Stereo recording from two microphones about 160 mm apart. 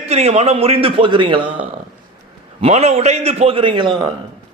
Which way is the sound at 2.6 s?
40° right (ahead or behind).